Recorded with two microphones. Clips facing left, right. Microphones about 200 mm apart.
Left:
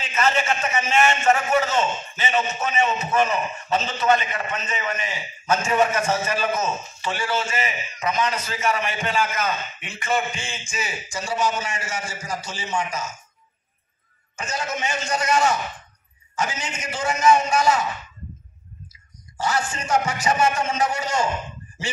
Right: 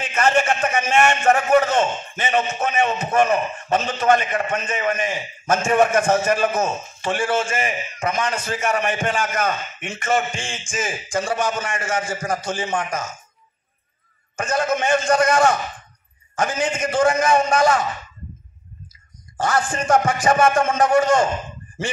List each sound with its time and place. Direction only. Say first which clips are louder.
0.0 s a man's voice: right 4 dB; 50° right (ahead or behind)
14.3 s a man's voice: right 8 dB; 55° right (ahead or behind)
19.3 s a man's voice: right 4 dB; 50° right (ahead or behind)